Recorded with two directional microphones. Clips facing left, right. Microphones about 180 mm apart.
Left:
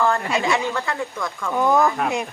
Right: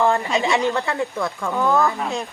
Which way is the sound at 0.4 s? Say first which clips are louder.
Right 2 dB; 20° right (ahead or behind).